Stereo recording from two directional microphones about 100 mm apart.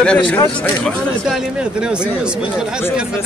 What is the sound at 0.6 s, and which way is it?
Speech, centre (ahead or behind).